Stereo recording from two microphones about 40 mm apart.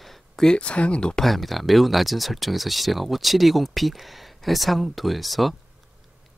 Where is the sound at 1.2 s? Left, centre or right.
Centre.